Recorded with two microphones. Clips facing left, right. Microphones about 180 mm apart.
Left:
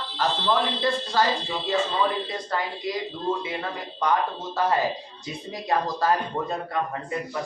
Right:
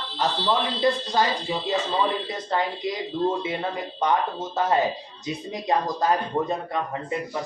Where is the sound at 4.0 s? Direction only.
20° right (ahead or behind).